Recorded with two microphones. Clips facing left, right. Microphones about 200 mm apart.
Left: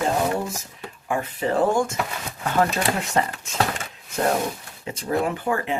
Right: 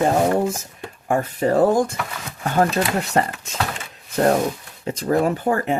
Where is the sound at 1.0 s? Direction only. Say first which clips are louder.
Right 5 dB; 45° right (ahead or behind).